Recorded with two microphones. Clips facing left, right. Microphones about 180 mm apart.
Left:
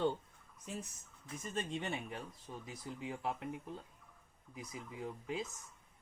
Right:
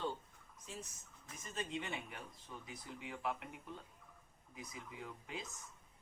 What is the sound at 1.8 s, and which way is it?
Speech, 30° left (ahead or behind).